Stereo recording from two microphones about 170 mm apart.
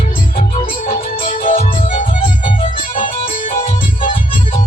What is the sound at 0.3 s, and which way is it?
Music, 35° left (ahead or behind).